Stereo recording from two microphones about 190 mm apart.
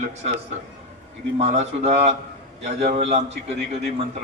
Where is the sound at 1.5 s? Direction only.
40° right (ahead or behind).